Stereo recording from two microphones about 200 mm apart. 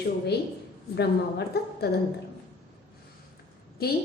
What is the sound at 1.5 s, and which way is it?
Speech, 50° left (ahead or behind).